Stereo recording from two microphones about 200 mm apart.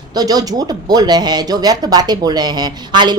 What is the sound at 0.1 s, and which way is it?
Speech, 20° right (ahead or behind).